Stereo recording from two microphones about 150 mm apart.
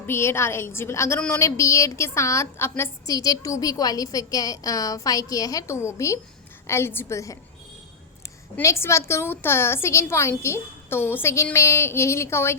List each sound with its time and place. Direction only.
0.1 s a woman's voice: 15° left (ahead or behind)
8.5 s a woman's voice: 15° left (ahead or behind)